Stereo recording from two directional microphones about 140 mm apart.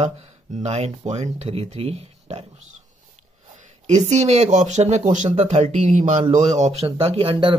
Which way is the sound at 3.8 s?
55° right (ahead or behind).